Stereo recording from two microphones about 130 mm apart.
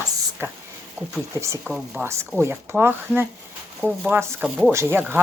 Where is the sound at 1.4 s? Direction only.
20° right (ahead or behind).